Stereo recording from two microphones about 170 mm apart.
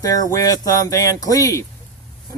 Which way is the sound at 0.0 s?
20° left (ahead or behind).